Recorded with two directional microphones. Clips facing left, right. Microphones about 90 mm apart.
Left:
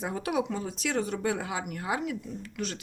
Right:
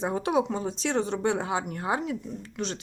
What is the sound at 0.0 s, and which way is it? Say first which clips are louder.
Speech: right 4 dB; 30° right (ahead or behind).